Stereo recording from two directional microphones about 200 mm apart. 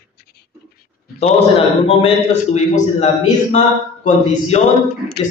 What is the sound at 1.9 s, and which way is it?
A man's voice, 30° left (ahead or behind).